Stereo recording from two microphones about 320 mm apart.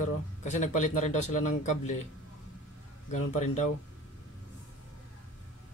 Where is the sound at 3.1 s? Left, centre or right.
Left.